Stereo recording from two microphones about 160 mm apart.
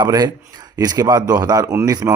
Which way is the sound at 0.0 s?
25° right (ahead or behind).